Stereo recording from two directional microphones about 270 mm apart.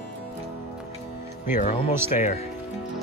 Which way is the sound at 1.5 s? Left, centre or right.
Left.